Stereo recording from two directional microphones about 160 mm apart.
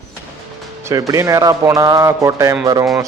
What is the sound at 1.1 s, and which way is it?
Speech, 20° right (ahead or behind).